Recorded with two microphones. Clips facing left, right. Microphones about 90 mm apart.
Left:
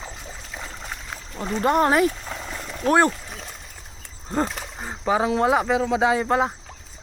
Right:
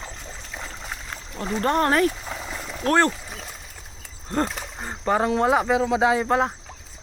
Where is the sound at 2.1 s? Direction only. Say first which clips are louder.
Even; centre (ahead or behind).